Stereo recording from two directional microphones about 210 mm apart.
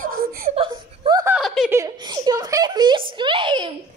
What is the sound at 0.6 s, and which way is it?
Whimper, 20° right (ahead or behind).